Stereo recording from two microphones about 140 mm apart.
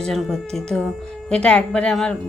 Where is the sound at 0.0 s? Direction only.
5° left (ahead or behind).